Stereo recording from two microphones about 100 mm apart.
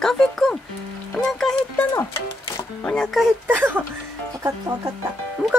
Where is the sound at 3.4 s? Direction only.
20° right (ahead or behind).